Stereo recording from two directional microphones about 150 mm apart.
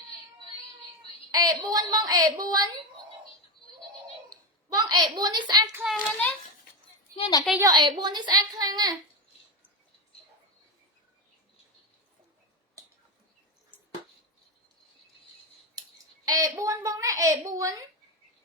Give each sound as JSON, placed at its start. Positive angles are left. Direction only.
{"t": 1.3, "sound": "a woman's voice", "side_deg": -25}
{"t": 4.8, "sound": "a woman's voice", "side_deg": -25}
{"t": 5.8, "sound": "a child's voice", "side_deg": 0}
{"t": 7.2, "sound": "a woman's voice", "side_deg": 25}
{"t": 7.6, "sound": "a woman's voice", "side_deg": -30}
{"t": 16.2, "sound": "a woman's voice", "side_deg": -25}